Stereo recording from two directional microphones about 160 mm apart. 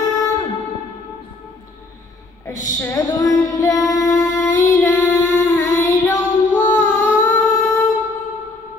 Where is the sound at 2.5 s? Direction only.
20° left (ahead or behind).